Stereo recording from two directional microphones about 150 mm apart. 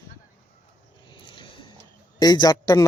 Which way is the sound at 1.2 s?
35° left (ahead or behind).